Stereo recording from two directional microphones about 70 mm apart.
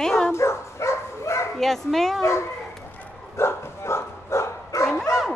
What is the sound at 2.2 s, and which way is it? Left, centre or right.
Speech, left.